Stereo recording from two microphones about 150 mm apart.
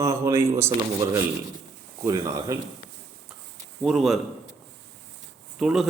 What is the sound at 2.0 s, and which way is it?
Speech, 20° right (ahead or behind).